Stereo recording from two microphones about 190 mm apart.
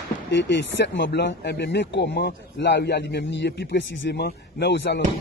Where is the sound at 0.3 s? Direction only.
70° left (ahead or behind).